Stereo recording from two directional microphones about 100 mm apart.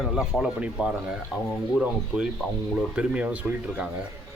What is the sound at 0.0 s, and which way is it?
Speech, centre (ahead or behind).